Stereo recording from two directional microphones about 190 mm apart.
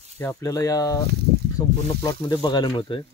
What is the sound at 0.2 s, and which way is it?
Speech, 15° left (ahead or behind).